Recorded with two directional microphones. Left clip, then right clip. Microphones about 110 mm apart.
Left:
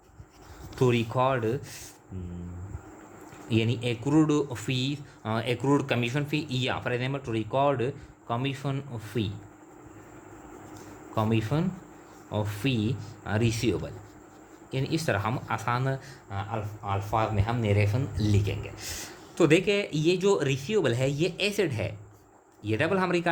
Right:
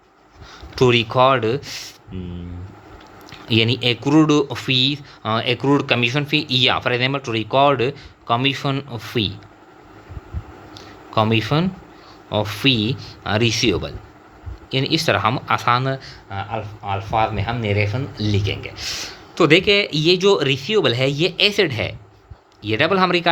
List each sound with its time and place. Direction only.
0.8 s speech: 50° right (ahead or behind)
2.1 s speech: 60° right (ahead or behind)
3.5 s speech: 50° right (ahead or behind)
11.1 s speech: 55° right (ahead or behind)
15.8 s speech: 25° right (ahead or behind)
18.4 s speech: 30° right (ahead or behind)